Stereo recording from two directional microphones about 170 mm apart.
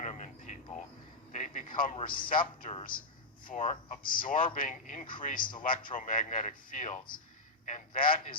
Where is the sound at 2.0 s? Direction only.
55° left (ahead or behind).